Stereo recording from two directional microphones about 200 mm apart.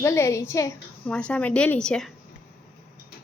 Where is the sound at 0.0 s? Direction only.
15° left (ahead or behind).